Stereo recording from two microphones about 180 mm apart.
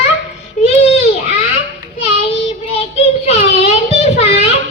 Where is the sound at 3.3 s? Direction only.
35° left (ahead or behind).